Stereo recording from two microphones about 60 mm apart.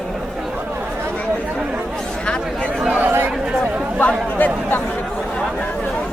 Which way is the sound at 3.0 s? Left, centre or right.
Right.